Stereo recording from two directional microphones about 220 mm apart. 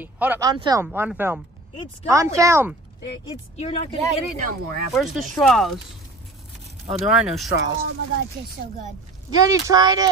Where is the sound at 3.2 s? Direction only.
25° left (ahead or behind).